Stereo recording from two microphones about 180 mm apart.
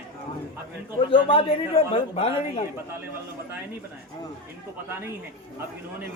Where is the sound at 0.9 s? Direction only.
30° left (ahead or behind).